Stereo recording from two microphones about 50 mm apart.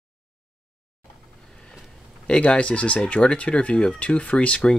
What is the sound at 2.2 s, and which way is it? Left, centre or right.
Speech, left.